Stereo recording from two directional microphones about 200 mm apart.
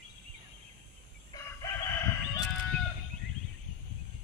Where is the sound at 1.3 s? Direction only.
15° left (ahead or behind).